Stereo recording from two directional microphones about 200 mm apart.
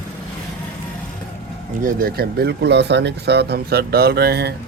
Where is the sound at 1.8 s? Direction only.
45° right (ahead or behind).